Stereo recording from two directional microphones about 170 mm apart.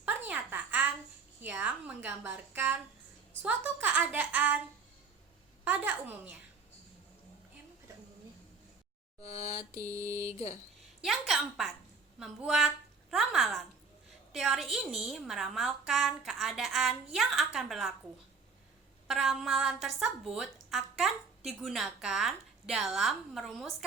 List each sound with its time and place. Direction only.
0.3 s a sound: 10° right (ahead or behind)
1.4 s a woman's voice: 10° right (ahead or behind)
5.6 s a woman's voice: 10° right (ahead or behind)
10.0 s a woman's voice: 15° right (ahead or behind)
11.0 s a woman's voice: centre (ahead or behind)
19.0 s a woman's voice: centre (ahead or behind)